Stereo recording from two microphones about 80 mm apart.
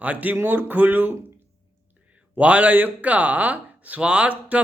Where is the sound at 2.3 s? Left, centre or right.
Centre.